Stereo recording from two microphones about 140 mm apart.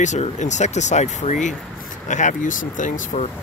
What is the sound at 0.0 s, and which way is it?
Speech, 60° left (ahead or behind).